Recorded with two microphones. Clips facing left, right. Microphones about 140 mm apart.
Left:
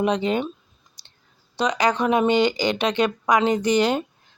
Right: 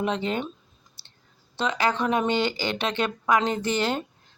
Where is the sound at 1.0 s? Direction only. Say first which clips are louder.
Even; 15° left (ahead or behind).